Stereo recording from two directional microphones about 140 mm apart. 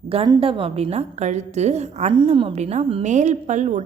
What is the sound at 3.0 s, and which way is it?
Speech, 55° right (ahead or behind).